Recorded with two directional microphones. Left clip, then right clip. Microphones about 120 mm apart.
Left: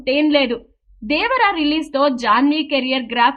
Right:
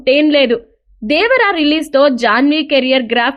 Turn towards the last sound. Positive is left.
turn(degrees=-45)  # may be behind; listen again after turning